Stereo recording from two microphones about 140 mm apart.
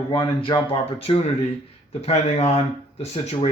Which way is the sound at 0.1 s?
35° left (ahead or behind).